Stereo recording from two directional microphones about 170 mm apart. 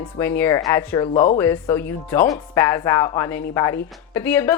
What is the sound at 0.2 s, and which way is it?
A woman's voice, 15° left (ahead or behind).